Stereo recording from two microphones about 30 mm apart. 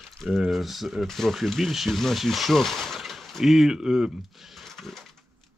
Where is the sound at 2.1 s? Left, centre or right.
Centre.